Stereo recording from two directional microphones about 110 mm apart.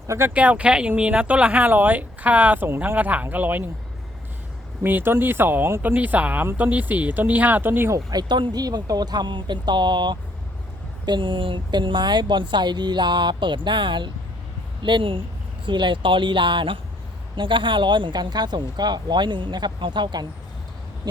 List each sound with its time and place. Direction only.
0.1 s speech: 20° right (ahead or behind)
4.8 s speech: 20° right (ahead or behind); by 20.2 s 45° right (ahead or behind)